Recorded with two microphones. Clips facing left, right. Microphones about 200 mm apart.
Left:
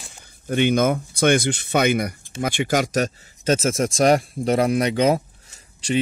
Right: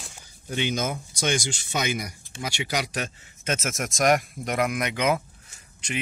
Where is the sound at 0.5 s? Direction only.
55° left (ahead or behind).